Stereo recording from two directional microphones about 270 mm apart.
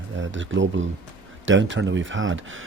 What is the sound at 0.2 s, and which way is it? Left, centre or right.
Speech, right.